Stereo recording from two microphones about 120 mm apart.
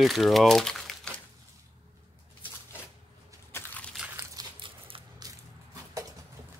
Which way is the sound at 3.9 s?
10° right (ahead or behind).